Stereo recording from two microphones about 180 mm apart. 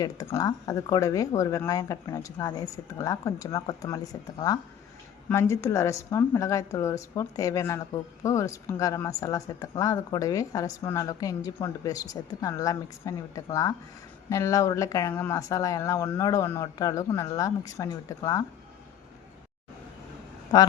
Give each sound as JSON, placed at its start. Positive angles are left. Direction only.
{"t": 0.0, "sound": "a woman's voice", "side_deg": 20}